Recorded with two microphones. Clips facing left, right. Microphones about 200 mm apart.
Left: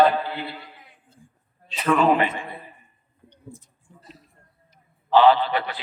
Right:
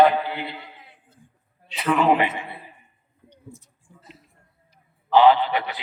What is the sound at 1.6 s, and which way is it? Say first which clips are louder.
A man's voice: even; 15° right (ahead or behind).